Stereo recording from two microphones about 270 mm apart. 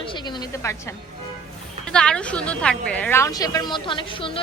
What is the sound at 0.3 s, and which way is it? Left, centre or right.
A woman's voice, centre.